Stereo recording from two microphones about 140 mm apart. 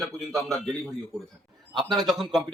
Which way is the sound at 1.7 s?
30° right (ahead or behind).